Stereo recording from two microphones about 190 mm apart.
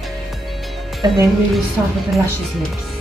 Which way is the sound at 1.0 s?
20° right (ahead or behind).